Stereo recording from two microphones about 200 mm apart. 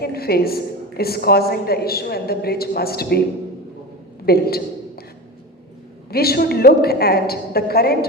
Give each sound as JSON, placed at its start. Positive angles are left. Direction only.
{"t": 0.0, "sound": "a woman's voice", "side_deg": 50}
{"t": 4.3, "sound": "a man's voice", "side_deg": 50}
{"t": 6.1, "sound": "a woman's voice", "side_deg": 50}